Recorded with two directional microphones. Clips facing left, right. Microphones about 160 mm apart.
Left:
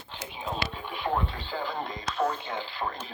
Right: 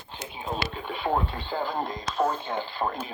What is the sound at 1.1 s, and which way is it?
Radio, 45° right (ahead or behind).